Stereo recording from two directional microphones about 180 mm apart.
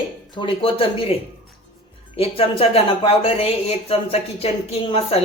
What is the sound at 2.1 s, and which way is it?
Speech, 30° left (ahead or behind).